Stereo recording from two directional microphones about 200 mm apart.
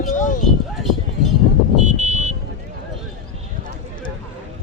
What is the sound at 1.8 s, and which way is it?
Car alarm, 35° right (ahead or behind).